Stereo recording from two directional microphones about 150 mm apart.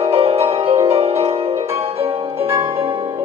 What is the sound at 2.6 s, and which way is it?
Music, 40° right (ahead or behind).